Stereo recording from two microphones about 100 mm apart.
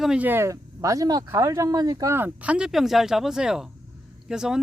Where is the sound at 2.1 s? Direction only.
15° right (ahead or behind).